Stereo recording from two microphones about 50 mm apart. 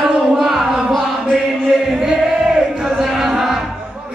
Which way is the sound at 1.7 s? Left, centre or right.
Centre.